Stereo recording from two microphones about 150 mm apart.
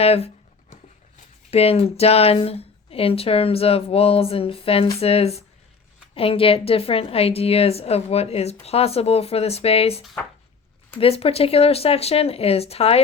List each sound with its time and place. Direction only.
0.0 s speech: 40° left (ahead or behind)
1.5 s speech: 40° left (ahead or behind)
11.0 s speech: 40° left (ahead or behind)